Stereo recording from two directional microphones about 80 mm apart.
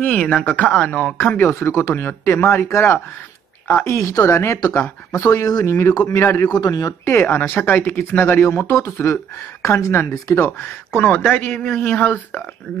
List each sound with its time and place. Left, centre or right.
0.0 s speech: centre
1.5 s speech: left
5.4 s speech: left
6.1 s speech: left
6.5 s speech: left
6.9 s speech: left
10.6 s speech: left